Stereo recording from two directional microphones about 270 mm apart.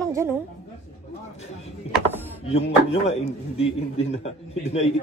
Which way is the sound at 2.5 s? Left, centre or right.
Left.